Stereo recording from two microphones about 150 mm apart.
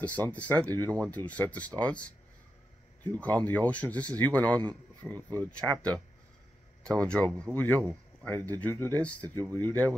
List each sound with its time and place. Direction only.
0.3 s speech: 10° left (ahead or behind)